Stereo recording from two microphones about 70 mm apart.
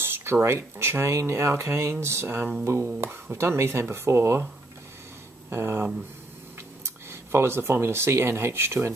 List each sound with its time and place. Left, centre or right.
0.0 s speech: right
5.5 s speech: right